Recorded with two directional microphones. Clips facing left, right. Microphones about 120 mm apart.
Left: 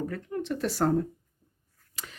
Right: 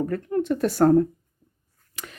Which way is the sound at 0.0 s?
50° right (ahead or behind).